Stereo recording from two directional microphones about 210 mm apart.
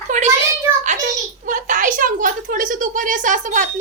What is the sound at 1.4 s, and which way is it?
A woman's voice, 40° right (ahead or behind).